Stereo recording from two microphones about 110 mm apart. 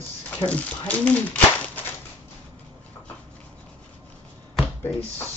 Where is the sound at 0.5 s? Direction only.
15° left (ahead or behind).